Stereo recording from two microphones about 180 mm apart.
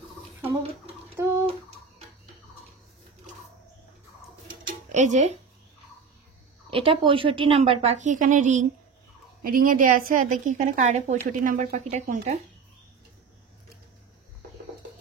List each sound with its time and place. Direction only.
1.1 s bathtub: 15° right (ahead or behind)
4.6 s music: 45° right (ahead or behind)
6.7 s a woman's voice: 30° right (ahead or behind)